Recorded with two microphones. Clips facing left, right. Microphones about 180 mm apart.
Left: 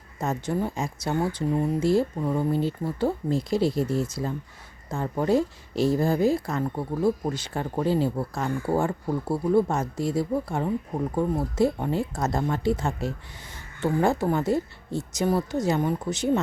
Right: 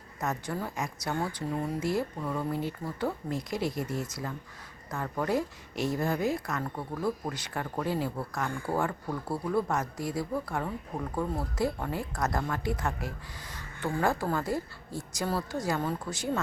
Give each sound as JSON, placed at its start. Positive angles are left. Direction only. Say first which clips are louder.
{"t": 0.2, "sound": "speech", "louder": "left 6 dB", "side_deg": 25}